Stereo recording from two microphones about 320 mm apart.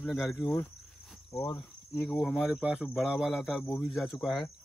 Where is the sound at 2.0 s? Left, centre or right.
Centre.